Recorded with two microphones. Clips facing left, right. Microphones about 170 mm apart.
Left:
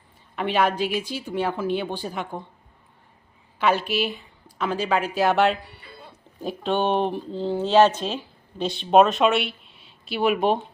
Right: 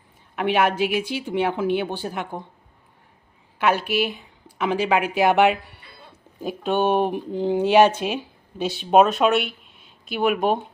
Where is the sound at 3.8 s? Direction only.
60° right (ahead or behind).